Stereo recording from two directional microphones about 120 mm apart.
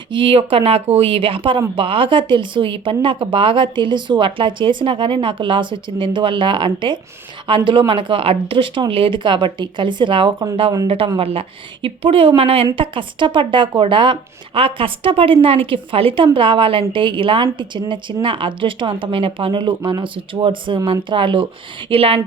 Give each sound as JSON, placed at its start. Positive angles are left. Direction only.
{"t": 0.1, "sound": "speech", "side_deg": -45}
{"t": 10.8, "sound": "speech", "side_deg": -50}